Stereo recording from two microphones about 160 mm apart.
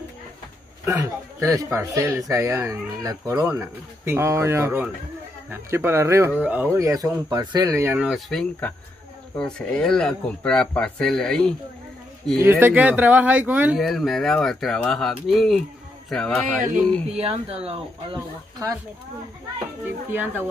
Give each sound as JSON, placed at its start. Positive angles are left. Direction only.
{"t": 0.8, "sound": "speech", "side_deg": -15}
{"t": 12.4, "sound": "speech", "side_deg": -10}
{"t": 13.7, "sound": "speech", "side_deg": 0}
{"t": 17.1, "sound": "speech", "side_deg": -40}
{"t": 18.1, "sound": "speech", "side_deg": -20}
{"t": 19.8, "sound": "speech", "side_deg": -10}